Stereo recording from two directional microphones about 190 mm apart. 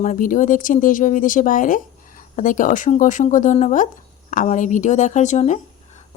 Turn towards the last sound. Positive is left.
turn(degrees=40)  # may be behind; listen again after turning